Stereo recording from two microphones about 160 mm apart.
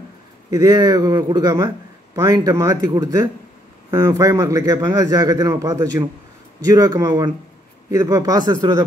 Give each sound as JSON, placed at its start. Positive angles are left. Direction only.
{"t": 0.5, "sound": "a man's voice", "side_deg": -25}